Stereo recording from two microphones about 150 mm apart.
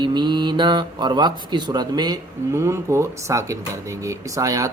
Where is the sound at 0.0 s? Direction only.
30° right (ahead or behind).